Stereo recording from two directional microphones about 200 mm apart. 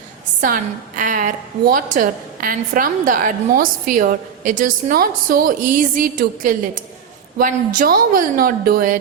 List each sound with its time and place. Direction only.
0.4 s a woman's voice: 40° right (ahead or behind)